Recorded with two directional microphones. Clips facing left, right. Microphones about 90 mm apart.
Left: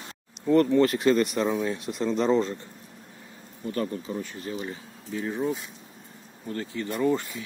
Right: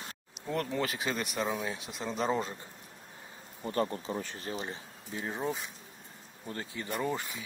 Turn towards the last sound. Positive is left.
turn(degrees=-5)  # may be behind; listen again after turning